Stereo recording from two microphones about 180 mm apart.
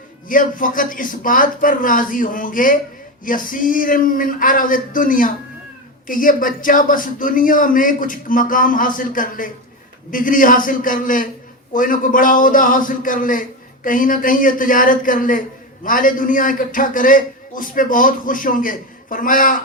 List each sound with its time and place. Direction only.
0.3 s a man's voice: 50° left (ahead or behind)